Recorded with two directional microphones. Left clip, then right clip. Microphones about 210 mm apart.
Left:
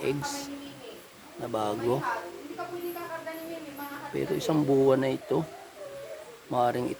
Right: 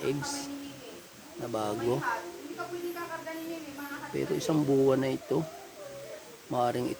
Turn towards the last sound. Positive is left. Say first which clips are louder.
# left 3 dB
turn(degrees=10)  # may be behind; listen again after turning